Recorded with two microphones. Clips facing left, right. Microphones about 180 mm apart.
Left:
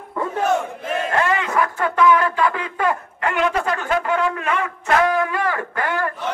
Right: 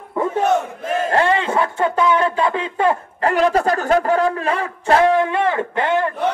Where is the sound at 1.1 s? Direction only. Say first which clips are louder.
Right 3 dB; 30° right (ahead or behind).